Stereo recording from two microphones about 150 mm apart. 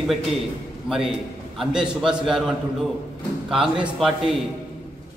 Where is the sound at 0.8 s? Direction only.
5° right (ahead or behind).